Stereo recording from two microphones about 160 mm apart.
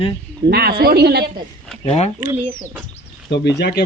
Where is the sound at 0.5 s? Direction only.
80° right.